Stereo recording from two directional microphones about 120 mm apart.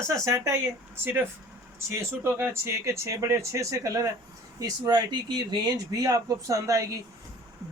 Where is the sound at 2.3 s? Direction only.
20° right (ahead or behind).